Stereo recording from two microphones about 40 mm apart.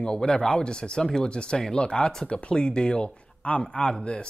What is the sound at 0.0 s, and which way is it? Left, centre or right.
Speech, left.